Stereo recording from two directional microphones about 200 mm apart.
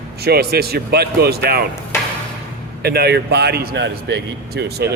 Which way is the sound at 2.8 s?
50° right (ahead or behind).